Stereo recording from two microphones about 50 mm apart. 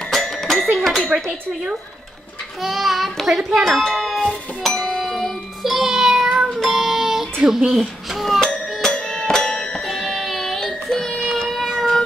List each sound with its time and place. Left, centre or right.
0.1 s music: centre
0.7 s a sound: centre
2.6 s a child's voice: centre
4.9 s music: centre
7.4 s speech: centre
8.4 s music: centre
9.8 s child singing: centre
11.4 s cat: centre